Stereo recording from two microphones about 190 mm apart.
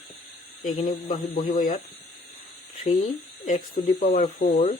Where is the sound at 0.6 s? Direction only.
45° left (ahead or behind).